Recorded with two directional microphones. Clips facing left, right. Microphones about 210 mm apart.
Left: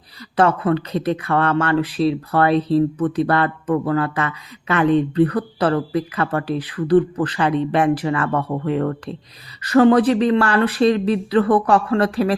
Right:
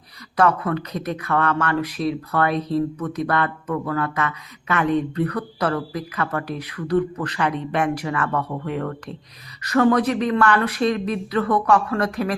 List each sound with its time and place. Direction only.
0.3 s speech: 30° left (ahead or behind)